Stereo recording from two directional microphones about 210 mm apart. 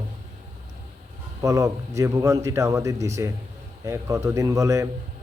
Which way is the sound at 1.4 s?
15° right (ahead or behind).